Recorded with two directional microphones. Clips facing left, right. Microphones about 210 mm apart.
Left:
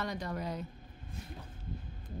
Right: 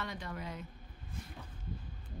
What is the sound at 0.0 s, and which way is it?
Speech, 40° left (ahead or behind).